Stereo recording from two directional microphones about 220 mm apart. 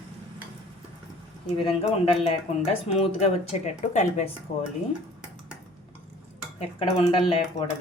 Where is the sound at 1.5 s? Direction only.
25° left (ahead or behind).